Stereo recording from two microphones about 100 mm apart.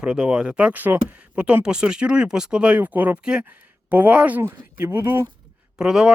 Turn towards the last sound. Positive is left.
turn(degrees=-5)  # may be behind; listen again after turning